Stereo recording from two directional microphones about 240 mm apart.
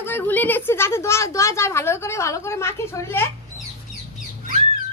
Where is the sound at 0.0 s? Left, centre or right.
Centre.